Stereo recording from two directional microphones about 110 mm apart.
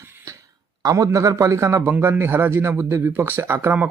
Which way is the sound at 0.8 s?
30° right (ahead or behind).